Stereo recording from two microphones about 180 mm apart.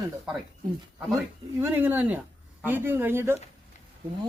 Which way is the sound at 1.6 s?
10° right (ahead or behind).